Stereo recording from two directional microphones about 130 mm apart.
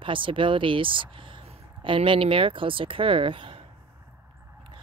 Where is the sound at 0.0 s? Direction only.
40° right (ahead or behind).